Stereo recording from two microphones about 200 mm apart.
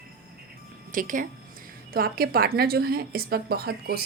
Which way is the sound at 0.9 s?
40° right (ahead or behind).